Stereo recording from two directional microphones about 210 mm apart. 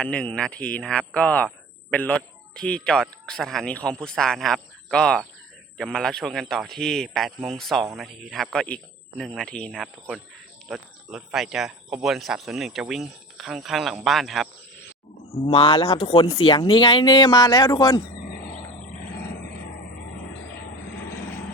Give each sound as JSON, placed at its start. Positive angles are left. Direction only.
{"t": 0.0, "sound": "speech", "side_deg": 5}
{"t": 15.4, "sound": "speech", "side_deg": 25}